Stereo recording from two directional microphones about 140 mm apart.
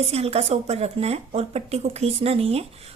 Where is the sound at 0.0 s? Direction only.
45° right (ahead or behind).